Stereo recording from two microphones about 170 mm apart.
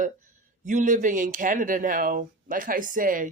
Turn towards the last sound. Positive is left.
turn(degrees=-50)  # may be behind; listen again after turning